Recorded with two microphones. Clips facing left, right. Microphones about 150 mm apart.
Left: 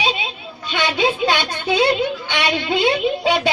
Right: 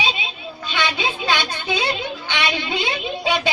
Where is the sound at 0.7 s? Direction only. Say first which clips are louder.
Left 5 dB; 50° left (ahead or behind).